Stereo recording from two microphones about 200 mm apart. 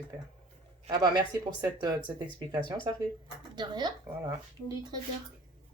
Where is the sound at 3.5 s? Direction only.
20° right (ahead or behind).